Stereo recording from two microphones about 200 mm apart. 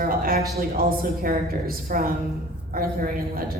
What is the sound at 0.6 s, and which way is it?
A woman's voice, 45° right (ahead or behind).